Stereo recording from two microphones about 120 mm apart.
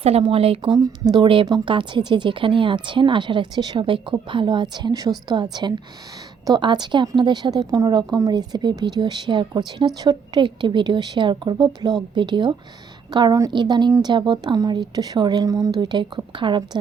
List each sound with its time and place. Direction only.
0.0 s speech: 50° right (ahead or behind)
0.7 s a woman's voice: 35° right (ahead or behind)